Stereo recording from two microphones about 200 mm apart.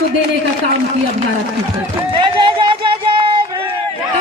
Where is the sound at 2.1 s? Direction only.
25° right (ahead or behind).